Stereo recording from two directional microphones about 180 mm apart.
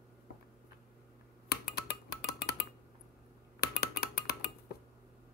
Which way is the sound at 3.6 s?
60° left (ahead or behind).